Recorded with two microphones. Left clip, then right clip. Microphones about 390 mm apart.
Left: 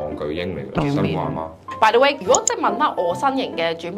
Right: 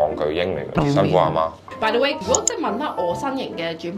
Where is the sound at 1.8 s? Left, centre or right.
Left.